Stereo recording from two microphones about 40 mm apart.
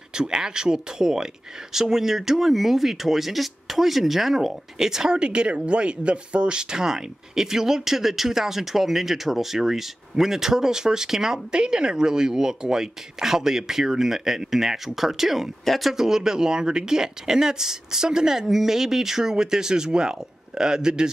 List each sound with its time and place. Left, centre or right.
0.1 s speech: centre
15.9 s speech: centre